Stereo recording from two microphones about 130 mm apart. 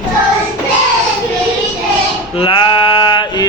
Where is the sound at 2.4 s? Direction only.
40° left (ahead or behind).